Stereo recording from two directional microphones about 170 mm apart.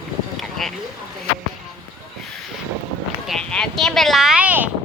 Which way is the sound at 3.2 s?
5° left (ahead or behind).